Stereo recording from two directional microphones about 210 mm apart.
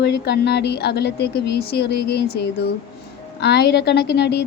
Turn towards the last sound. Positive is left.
turn(degrees=55)  # may be behind; listen again after turning